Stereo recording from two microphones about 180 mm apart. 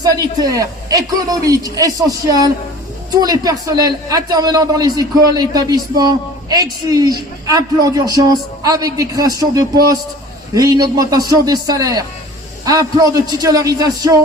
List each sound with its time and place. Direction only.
0.0 s a man's voice: 20° right (ahead or behind)